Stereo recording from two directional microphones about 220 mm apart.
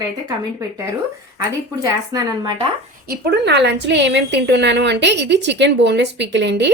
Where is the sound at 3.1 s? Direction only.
50° right (ahead or behind).